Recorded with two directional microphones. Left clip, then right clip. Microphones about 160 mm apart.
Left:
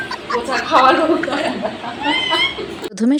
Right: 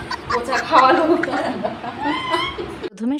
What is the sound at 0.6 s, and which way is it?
Speech, centre (ahead or behind).